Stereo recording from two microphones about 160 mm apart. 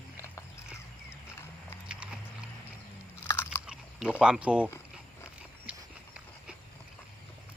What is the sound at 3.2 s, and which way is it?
Chewing, 15° left (ahead or behind).